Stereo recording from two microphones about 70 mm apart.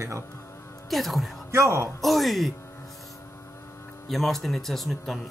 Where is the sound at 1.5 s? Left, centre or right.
Right.